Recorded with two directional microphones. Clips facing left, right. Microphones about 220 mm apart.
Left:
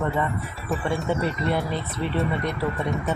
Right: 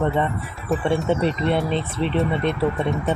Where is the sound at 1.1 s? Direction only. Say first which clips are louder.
Right 2 dB; 25° right (ahead or behind).